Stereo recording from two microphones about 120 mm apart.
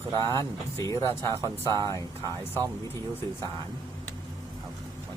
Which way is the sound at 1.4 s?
30° right (ahead or behind).